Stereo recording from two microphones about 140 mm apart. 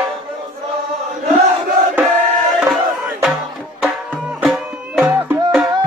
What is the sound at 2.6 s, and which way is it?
Crowd, centre (ahead or behind).